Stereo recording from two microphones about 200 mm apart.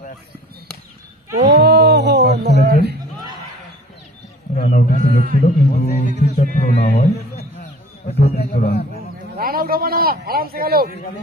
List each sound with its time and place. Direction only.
1.4 s a sound: 55° right (ahead or behind)
4.6 s a man's voice: 40° left (ahead or behind)
8.1 s a man's voice: 30° left (ahead or behind)
8.4 s a man's voice: 50° left (ahead or behind)
9.4 s a man's voice: 45° right (ahead or behind)